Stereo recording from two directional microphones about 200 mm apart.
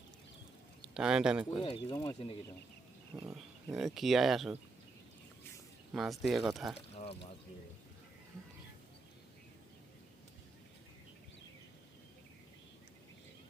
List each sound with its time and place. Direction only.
0.8 s speech: 5° right (ahead or behind)
1.6 s speech: 25° left (ahead or behind)
3.1 s speech: 20° right (ahead or behind)
3.8 s speech: centre (ahead or behind)
5.9 s speech: centre (ahead or behind)
6.7 s speech: 30° left (ahead or behind)